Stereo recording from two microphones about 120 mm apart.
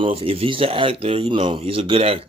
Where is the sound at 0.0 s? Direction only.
50° right (ahead or behind).